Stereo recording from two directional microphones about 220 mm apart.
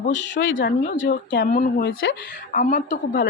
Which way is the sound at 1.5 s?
40° left (ahead or behind).